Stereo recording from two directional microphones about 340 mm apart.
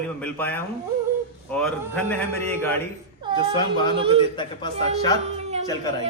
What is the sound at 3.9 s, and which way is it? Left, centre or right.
Speech, centre.